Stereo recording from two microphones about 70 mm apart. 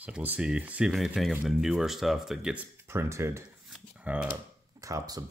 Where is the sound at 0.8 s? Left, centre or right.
Centre.